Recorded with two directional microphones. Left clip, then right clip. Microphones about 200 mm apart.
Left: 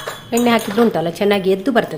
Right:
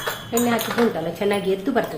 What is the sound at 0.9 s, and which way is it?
Speech, 55° left (ahead or behind).